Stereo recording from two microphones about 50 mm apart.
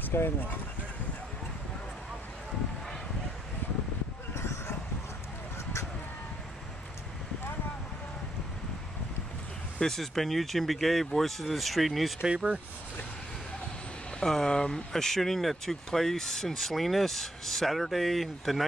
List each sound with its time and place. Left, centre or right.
0.1 s speech: left
9.8 s speech: centre
12.2 s speech: centre
14.2 s speech: centre